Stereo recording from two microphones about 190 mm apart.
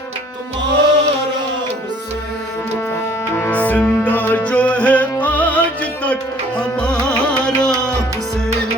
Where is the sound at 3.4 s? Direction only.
10° left (ahead or behind).